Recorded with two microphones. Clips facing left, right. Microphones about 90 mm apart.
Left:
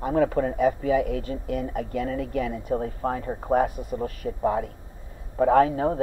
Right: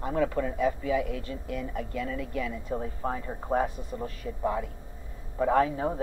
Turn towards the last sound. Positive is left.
turn(degrees=40)  # may be behind; listen again after turning